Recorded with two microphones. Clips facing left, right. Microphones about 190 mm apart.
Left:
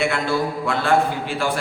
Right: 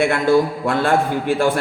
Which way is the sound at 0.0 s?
50° right (ahead or behind).